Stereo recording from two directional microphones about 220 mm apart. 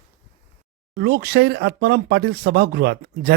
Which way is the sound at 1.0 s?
45° right (ahead or behind).